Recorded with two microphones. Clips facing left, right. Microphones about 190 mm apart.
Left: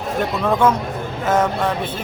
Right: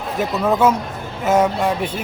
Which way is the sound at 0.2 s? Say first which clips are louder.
Right 1 dB; 5° right (ahead or behind).